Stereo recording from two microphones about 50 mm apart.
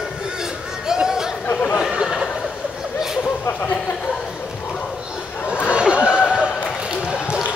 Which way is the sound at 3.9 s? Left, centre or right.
Centre.